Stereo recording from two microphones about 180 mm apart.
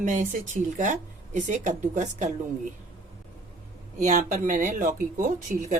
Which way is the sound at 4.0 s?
40° right (ahead or behind).